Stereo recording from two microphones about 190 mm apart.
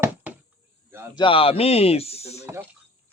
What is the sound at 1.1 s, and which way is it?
Speech, 25° left (ahead or behind).